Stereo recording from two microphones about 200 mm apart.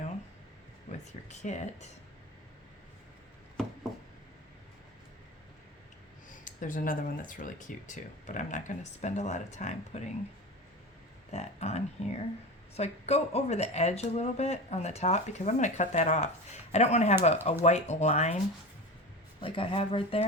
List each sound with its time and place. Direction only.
1.3 s speech: 35° left (ahead or behind)
6.4 s speech: 40° left (ahead or behind)
11.3 s speech: 35° left (ahead or behind)
19.4 s speech: 25° left (ahead or behind)